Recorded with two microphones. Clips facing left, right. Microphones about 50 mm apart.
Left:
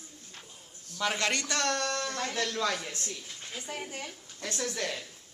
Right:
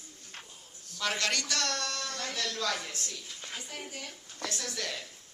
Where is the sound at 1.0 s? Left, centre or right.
Left.